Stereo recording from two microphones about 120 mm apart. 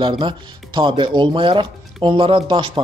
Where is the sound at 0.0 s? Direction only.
45° right (ahead or behind).